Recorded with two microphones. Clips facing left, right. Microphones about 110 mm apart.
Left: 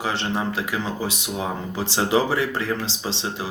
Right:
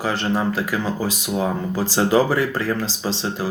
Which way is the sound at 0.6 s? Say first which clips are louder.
Right 3 dB; 35° right (ahead or behind).